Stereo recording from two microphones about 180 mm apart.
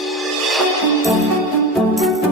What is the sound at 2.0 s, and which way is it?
Music, centre (ahead or behind).